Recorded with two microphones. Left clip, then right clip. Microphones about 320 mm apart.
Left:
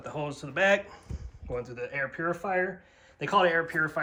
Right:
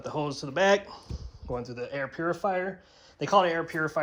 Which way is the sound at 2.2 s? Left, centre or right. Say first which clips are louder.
Right 1 dB; centre.